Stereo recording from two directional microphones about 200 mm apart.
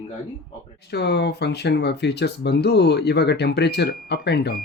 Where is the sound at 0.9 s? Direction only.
55° left (ahead or behind).